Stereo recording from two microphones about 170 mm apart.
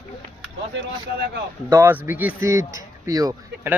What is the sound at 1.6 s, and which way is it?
Speech, 10° right (ahead or behind).